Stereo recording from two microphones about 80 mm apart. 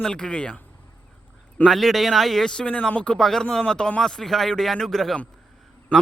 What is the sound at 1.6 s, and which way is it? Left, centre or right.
Speech, centre.